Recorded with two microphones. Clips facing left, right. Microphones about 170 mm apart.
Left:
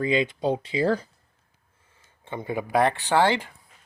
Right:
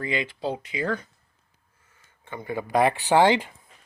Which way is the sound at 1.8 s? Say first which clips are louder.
Left 2 dB; 30° left (ahead or behind).